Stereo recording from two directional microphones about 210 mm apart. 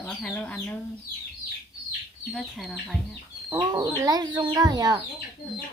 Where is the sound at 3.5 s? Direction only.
20° right (ahead or behind).